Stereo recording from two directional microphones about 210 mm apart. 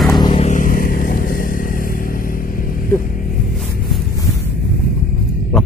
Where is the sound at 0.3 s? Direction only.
35° left (ahead or behind).